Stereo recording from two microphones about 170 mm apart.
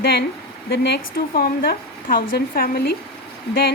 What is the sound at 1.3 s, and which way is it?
A woman's voice, 60° left (ahead or behind).